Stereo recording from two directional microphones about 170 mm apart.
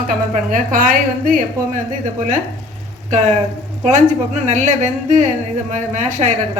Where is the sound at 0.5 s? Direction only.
50° right (ahead or behind).